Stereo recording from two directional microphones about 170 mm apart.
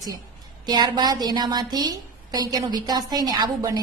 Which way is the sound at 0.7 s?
25° right (ahead or behind).